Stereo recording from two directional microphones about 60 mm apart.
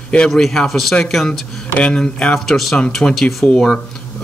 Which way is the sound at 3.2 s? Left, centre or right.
Centre.